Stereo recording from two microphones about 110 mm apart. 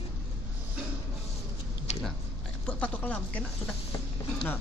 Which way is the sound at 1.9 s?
90° left.